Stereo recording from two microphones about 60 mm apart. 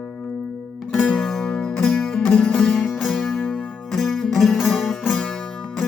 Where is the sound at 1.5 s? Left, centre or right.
Centre.